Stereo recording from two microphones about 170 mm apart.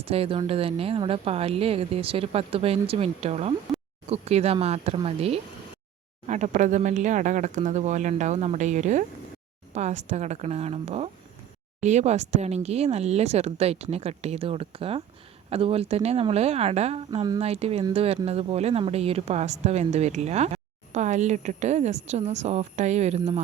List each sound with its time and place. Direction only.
0.0 s speech: 35° right (ahead or behind)